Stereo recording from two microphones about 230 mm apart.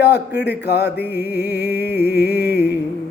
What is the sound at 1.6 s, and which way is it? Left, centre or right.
Music, right.